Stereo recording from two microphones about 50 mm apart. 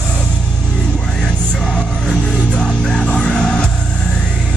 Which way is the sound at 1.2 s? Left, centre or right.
Centre.